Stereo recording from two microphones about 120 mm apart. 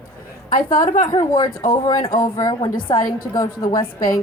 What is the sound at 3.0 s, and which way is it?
Speech, 30° left (ahead or behind).